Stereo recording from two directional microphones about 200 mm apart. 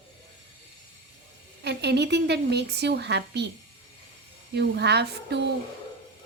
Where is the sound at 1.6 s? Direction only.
55° right (ahead or behind).